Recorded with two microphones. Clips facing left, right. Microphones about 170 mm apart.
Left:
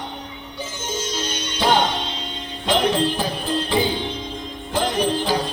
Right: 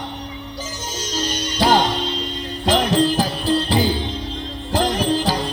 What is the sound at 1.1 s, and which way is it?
Music, 40° right (ahead or behind).